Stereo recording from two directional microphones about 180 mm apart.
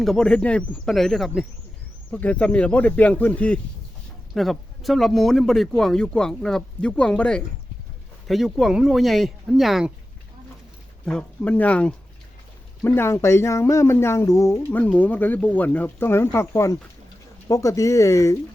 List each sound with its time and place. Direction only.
0.0 s speech: centre (ahead or behind)
11.0 s speech: 5° left (ahead or behind)